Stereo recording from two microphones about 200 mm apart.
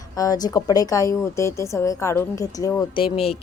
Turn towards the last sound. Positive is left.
turn(degrees=20)  # may be behind; listen again after turning